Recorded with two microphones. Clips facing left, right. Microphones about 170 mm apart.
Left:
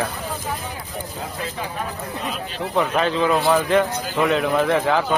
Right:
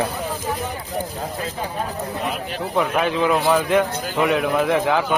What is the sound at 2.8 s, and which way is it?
A man's voice, 10° right (ahead or behind).